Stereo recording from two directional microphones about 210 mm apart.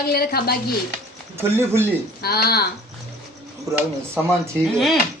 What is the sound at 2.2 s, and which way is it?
Speech, 50° left (ahead or behind).